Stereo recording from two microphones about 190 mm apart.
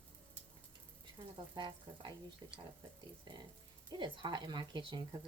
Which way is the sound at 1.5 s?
20° right (ahead or behind).